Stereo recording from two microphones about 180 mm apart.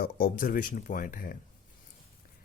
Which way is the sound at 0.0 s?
55° left (ahead or behind).